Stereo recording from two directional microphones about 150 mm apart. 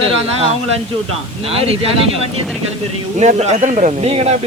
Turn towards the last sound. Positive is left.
turn(degrees=-45)  # may be behind; listen again after turning